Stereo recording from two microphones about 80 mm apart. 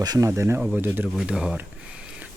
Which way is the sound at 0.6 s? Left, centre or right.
Centre.